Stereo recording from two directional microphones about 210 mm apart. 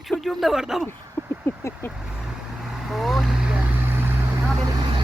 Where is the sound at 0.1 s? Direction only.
Centre (ahead or behind).